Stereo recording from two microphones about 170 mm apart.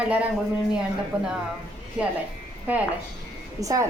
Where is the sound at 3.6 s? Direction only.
20° right (ahead or behind).